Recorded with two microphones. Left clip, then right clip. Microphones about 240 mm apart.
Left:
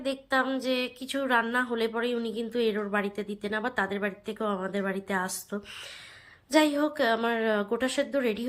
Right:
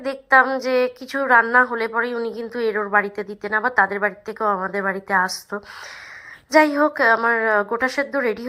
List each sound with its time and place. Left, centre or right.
0.0 s a woman's voice: right
6.6 s a woman's voice: right